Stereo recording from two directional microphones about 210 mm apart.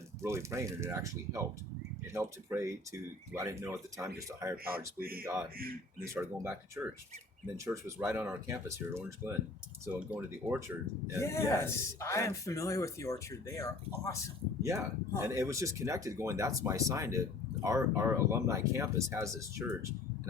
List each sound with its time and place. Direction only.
0.2 s speech: 15° right (ahead or behind)
4.5 s a man's voice: 45° right (ahead or behind)
6.4 s speech: 10° right (ahead or behind)
11.2 s speech: 15° left (ahead or behind)
14.6 s speech: 15° right (ahead or behind)